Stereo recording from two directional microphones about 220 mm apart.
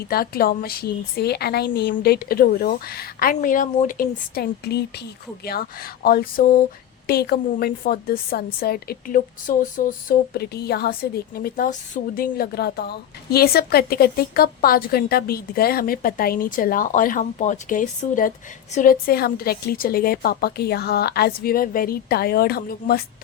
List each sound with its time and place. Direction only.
0.1 s a woman's voice: 45° left (ahead or behind)